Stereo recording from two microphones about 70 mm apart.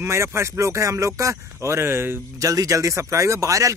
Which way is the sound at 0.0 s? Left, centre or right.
Right.